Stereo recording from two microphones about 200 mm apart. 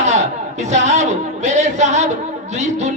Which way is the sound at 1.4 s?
35° right (ahead or behind).